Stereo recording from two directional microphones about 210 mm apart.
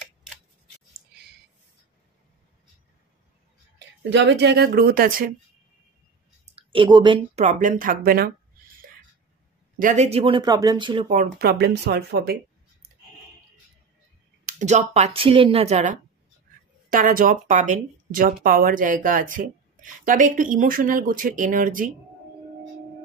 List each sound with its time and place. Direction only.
4.1 s speech: 60° right (ahead or behind)
6.5 s a woman's voice: 25° right (ahead or behind)
7.3 s speech: 35° right (ahead or behind)
9.8 s speech: 35° right (ahead or behind)
11.1 s speech: 45° right (ahead or behind)
14.4 s speech: 35° right (ahead or behind)